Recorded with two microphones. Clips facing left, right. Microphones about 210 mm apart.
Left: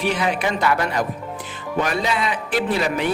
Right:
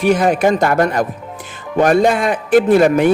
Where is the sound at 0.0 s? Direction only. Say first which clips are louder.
Right 9 dB; 45° right (ahead or behind).